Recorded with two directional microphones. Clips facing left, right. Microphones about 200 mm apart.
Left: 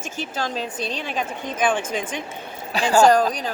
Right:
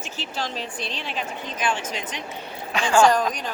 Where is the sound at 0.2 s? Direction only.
45° left (ahead or behind).